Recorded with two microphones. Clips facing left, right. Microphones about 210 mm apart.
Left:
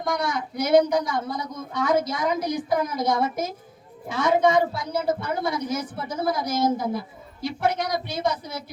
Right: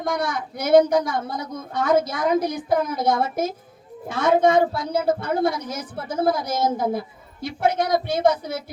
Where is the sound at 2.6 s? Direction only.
55° right (ahead or behind).